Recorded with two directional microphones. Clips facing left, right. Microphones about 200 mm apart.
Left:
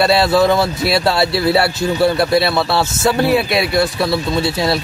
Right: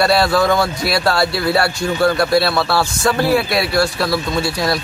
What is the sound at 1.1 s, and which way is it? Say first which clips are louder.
A man's voice: left 2 dB; 25° left (ahead or behind).